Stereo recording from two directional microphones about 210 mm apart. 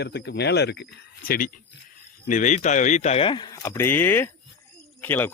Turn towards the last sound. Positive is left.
turn(degrees=10)  # may be behind; listen again after turning